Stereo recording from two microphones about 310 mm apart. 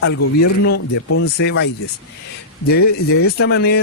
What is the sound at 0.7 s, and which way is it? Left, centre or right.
Speech, left.